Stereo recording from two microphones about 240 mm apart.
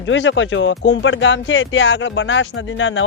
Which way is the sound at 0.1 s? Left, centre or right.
Left.